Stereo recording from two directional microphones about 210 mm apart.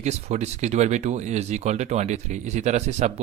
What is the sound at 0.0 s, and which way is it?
Speech, 30° right (ahead or behind).